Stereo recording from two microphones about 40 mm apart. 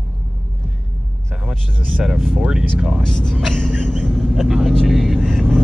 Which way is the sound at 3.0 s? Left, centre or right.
Centre.